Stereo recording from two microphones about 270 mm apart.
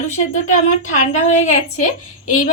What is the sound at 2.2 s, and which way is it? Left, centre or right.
Speech, left.